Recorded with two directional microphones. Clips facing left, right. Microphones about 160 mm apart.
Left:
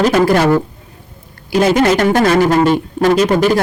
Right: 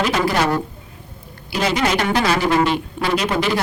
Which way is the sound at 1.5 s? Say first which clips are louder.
Left 8 dB; 50° left (ahead or behind).